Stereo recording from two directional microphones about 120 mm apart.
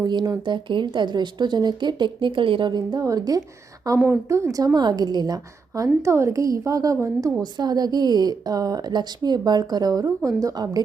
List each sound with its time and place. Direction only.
0.0 s speech: 35° right (ahead or behind)
3.8 s a woman's voice: 20° right (ahead or behind)
7.4 s speech: 35° right (ahead or behind)